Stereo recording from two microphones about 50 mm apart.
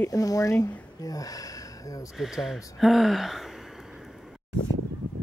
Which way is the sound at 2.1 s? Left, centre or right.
Centre.